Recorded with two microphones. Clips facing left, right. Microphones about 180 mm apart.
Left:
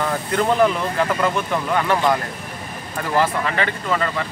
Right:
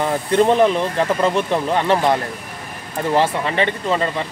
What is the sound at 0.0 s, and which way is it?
Speech, 25° right (ahead or behind).